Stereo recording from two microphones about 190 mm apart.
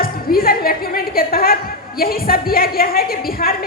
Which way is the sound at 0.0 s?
50° left (ahead or behind).